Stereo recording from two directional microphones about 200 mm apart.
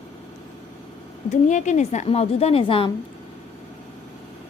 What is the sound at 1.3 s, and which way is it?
A woman's voice, 35° left (ahead or behind).